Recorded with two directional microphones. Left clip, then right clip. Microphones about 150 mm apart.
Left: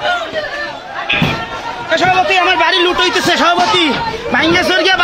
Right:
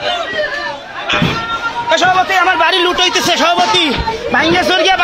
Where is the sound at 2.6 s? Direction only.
5° right (ahead or behind).